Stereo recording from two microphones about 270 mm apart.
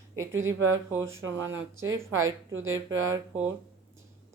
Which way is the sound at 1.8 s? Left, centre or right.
Right.